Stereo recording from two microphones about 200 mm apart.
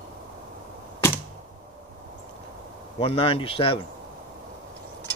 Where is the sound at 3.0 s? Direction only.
30° left (ahead or behind).